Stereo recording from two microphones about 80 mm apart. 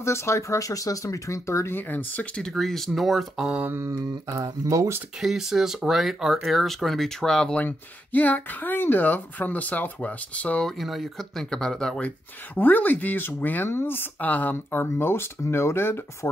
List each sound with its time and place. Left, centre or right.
0.0 s speech: left
1.8 s speech: left
2.3 s speech: centre
3.7 s speech: right
5.2 s speech: centre
7.6 s speech: left
10.8 s speech: centre
12.5 s speech: left